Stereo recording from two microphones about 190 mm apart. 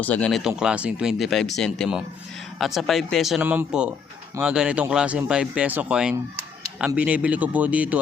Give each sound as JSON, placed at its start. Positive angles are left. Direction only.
{"t": 0.0, "sound": "a man's voice", "side_deg": 5}